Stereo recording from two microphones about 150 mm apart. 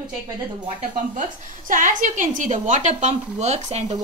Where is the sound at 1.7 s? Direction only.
60° right (ahead or behind).